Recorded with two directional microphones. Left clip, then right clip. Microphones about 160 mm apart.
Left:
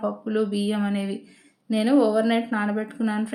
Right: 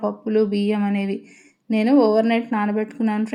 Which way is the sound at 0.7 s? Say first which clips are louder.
Right 4 dB; 10° right (ahead or behind).